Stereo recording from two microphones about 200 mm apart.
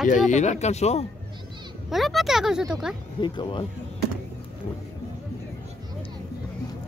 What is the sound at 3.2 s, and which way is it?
Speech, 25° left (ahead or behind).